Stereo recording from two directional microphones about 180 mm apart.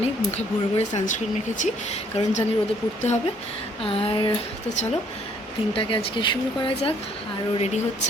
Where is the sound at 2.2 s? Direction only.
40° left (ahead or behind).